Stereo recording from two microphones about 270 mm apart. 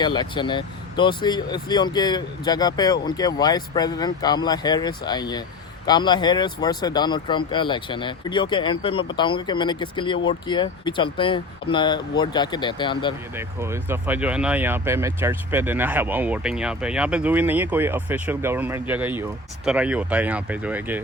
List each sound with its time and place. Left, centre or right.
0.0 s speech: centre
13.3 s speech: centre